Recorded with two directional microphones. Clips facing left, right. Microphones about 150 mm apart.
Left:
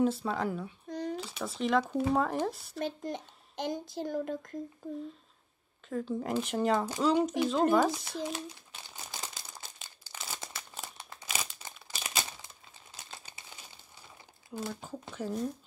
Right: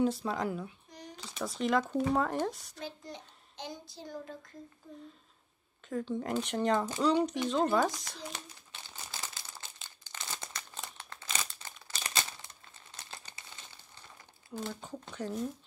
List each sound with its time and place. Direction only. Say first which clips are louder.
0.0 s speech: left 1 dB; centre (ahead or behind)
0.8 s a sound: left 13 dB; 60° left (ahead or behind)
1.1 s speech: left 2 dB; 5° left (ahead or behind)
2.8 s speech: left 9 dB; 50° left (ahead or behind)
5.9 s speech: left 1 dB; centre (ahead or behind)
8.9 s a sound: left 1 dB; 15° left (ahead or behind)
9.6 s crumpling: left 1 dB; 10° left (ahead or behind)
14.6 s speech: left 1 dB; 5° left (ahead or behind)